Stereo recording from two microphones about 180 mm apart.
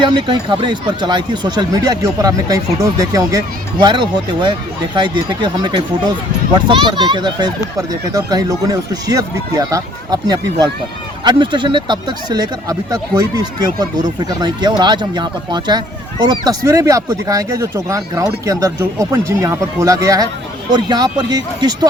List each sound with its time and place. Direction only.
0.0 s speech: 25° right (ahead or behind)